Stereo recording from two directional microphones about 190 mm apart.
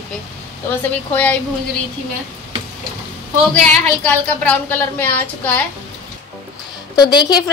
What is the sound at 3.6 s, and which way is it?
A woman's voice, 5° left (ahead or behind).